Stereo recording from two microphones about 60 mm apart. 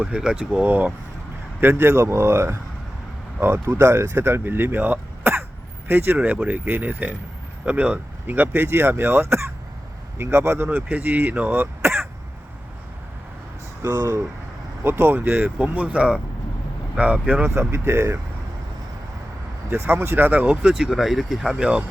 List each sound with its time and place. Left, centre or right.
0.0 s speech: centre
1.6 s a man's voice: right
3.7 s speech: right
6.1 s speech: right
7.6 s a man's voice: centre; by 10.7 s right
10.7 s speech: right
13.8 s speech: right
14.8 s speech: right
17.5 s a man's voice: right
19.7 s speech: right
20.7 s speech: centre
21.6 s speech: centre